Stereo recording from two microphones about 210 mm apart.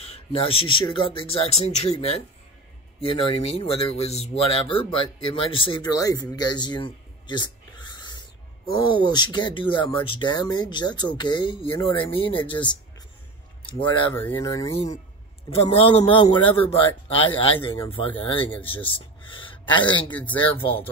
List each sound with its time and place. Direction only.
0.0 s speech: 30° left (ahead or behind)
6.3 s a sound: 20° left (ahead or behind)
8.7 s speech: 20° left (ahead or behind)
14.1 s a man's voice: 15° left (ahead or behind)
20.1 s speech: 10° left (ahead or behind)